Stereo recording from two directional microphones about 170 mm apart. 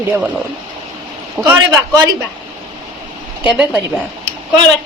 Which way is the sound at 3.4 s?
5° right (ahead or behind).